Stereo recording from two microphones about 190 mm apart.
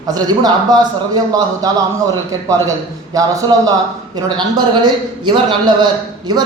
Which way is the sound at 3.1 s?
20° right (ahead or behind).